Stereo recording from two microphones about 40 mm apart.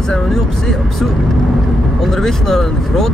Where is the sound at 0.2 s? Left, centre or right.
Centre.